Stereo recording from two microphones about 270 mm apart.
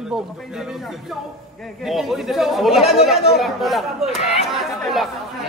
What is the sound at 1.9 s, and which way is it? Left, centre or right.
Speech, centre.